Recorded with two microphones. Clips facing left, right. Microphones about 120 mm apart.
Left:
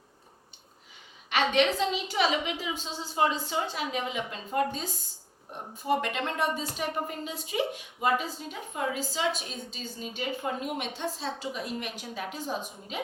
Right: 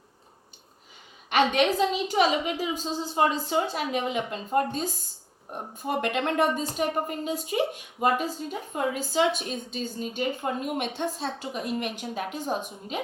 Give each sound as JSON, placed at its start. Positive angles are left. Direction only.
{"t": 1.3, "sound": "a woman's voice", "side_deg": -50}